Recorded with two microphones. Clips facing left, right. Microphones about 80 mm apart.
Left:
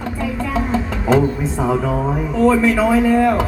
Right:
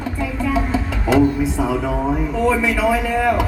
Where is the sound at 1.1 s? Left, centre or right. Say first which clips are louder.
Right 1 dB; left.